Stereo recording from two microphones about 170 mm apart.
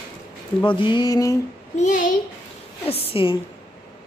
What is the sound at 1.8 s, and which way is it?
Speech, 50° left (ahead or behind).